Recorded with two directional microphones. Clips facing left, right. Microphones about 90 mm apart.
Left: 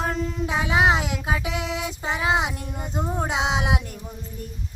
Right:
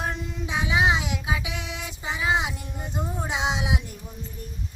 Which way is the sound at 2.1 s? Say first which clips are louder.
Left 2 dB; 55° left (ahead or behind).